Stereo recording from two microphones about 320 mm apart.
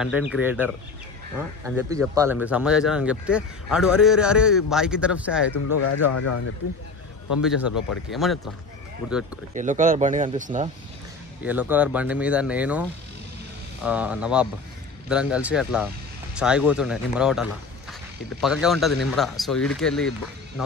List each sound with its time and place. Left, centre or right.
0.0 s a man's voice: centre
1.8 s a man's voice: centre
5.5 s speech: left
7.4 s a man's voice: centre
9.5 s speech: right
11.4 s a man's voice: centre
13.8 s a man's voice: centre